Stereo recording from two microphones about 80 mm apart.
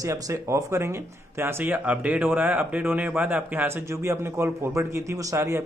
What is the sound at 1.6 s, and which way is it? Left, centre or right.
Speech, centre.